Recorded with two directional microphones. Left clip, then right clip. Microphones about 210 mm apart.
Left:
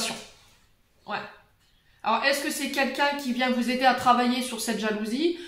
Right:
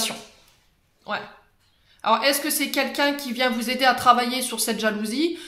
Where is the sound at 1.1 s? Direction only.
55° right (ahead or behind).